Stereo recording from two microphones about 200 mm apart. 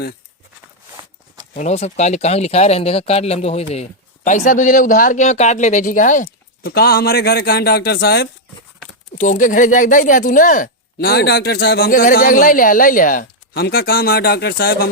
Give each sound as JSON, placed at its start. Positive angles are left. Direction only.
{"t": 1.5, "sound": "speech", "side_deg": 35}
{"t": 9.1, "sound": "speech", "side_deg": 40}